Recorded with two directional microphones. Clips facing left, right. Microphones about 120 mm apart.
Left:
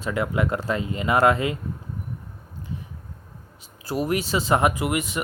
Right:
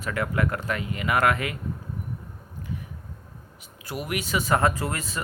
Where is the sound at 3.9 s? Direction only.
35° left (ahead or behind); by 5.2 s 20° left (ahead or behind).